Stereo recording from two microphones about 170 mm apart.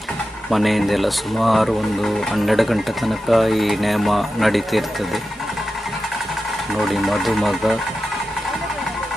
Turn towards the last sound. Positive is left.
turn(degrees=0)  # may be behind; listen again after turning